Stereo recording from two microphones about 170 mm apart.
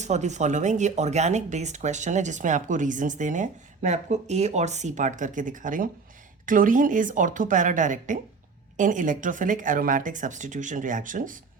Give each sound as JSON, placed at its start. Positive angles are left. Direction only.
{"t": 0.0, "sound": "speech", "side_deg": -45}